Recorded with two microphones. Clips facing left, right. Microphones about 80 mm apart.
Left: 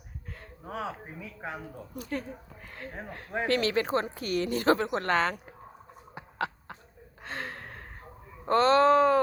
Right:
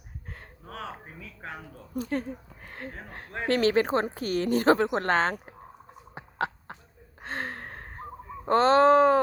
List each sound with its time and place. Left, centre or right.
0.3 s a sound: right
0.6 s speech: centre
2.0 s speech: right
6.1 s chicken: right
7.2 s gasp: right
8.4 s speech: right